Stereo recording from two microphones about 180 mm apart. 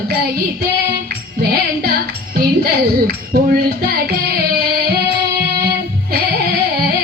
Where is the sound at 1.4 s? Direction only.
55° right (ahead or behind).